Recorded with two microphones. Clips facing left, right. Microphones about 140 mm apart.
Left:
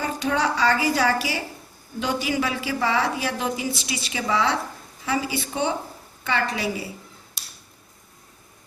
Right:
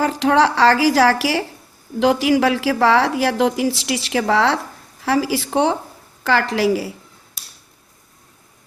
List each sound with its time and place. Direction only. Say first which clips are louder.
0.0 s a woman's voice: right 8 dB; 80° right